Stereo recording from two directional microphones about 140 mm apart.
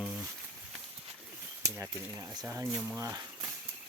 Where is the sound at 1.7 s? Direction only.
20° right (ahead or behind).